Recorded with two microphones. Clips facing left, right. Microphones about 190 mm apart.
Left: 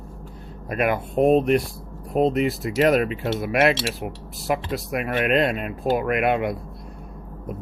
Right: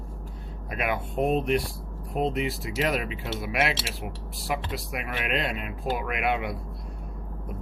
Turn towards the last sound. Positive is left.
turn(degrees=50)  # may be behind; listen again after turning